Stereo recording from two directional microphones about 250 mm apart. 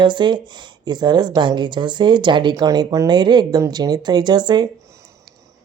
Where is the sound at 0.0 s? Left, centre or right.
Centre.